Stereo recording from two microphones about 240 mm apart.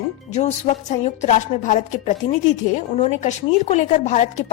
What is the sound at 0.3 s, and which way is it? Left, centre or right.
A woman's voice, left.